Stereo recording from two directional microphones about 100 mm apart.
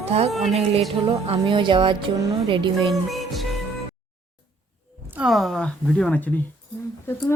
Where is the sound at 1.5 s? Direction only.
55° right (ahead or behind).